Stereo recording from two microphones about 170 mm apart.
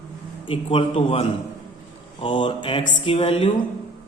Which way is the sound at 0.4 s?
30° left (ahead or behind).